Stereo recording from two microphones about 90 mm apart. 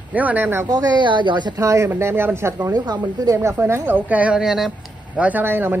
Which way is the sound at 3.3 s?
30° right (ahead or behind).